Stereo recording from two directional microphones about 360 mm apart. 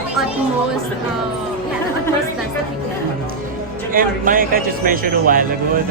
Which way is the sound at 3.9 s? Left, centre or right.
Right.